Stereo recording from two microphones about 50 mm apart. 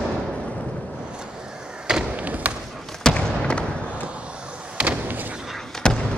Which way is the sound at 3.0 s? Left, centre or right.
Centre.